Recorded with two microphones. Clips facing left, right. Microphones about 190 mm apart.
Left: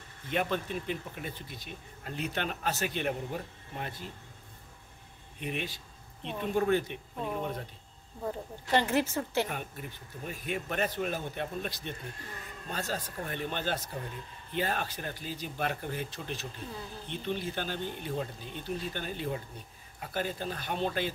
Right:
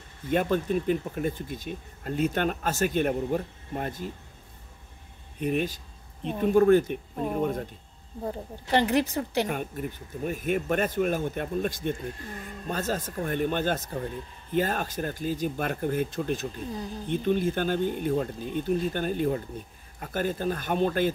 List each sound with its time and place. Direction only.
0.3 s speech: 45° right (ahead or behind)
5.4 s speech: 45° right (ahead or behind)
8.2 s speech: 30° right (ahead or behind)
8.7 s a woman's voice: 15° right (ahead or behind)
9.5 s speech: 50° right (ahead or behind)